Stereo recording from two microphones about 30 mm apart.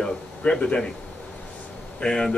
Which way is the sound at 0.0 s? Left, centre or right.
Left.